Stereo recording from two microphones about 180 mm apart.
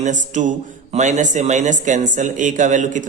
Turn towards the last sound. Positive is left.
turn(degrees=-45)  # may be behind; listen again after turning